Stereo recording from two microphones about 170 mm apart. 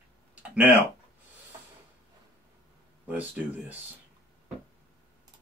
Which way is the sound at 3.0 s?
10° right (ahead or behind).